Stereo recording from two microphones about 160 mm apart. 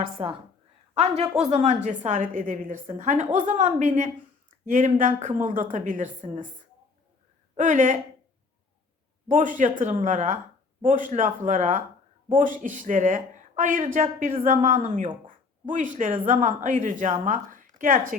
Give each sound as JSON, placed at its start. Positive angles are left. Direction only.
{"t": 0.0, "sound": "a woman's voice", "side_deg": -35}
{"t": 7.5, "sound": "speech", "side_deg": -50}
{"t": 9.3, "sound": "speech", "side_deg": -55}